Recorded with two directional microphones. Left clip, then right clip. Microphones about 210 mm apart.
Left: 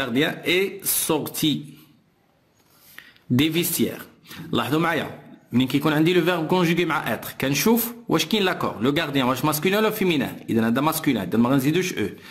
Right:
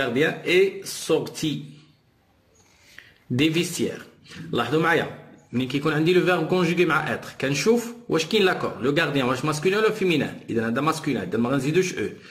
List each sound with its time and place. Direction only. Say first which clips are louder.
0.0 s speech: even; 45° left (ahead or behind)
3.0 s a man's voice: left 1 dB; 45° left (ahead or behind)